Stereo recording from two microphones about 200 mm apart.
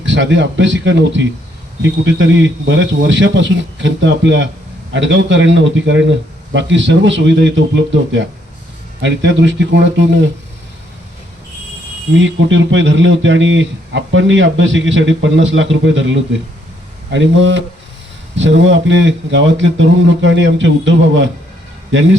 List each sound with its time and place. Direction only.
0.0 s speech: 65° right (ahead or behind)
12.1 s speech: 70° right (ahead or behind)